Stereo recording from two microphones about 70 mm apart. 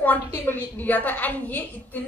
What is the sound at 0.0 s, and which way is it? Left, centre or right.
A woman's voice, left.